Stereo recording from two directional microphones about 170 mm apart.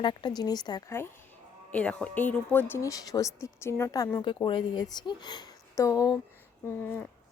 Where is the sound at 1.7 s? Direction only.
5° left (ahead or behind).